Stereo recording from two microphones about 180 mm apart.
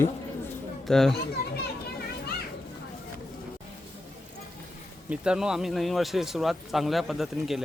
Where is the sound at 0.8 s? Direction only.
Centre (ahead or behind).